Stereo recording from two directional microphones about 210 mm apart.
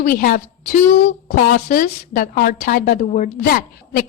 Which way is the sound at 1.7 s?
40° left (ahead or behind).